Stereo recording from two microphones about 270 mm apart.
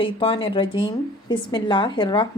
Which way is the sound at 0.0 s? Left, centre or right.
Centre.